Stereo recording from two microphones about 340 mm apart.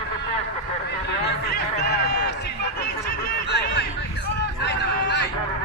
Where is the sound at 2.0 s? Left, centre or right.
Left.